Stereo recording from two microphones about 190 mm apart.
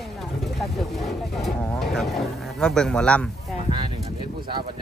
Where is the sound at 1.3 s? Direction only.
Centre (ahead or behind).